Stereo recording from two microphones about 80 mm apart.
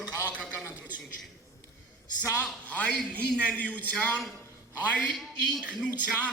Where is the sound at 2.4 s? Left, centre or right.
Centre.